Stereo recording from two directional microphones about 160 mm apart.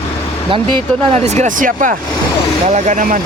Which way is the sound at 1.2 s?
45° right (ahead or behind).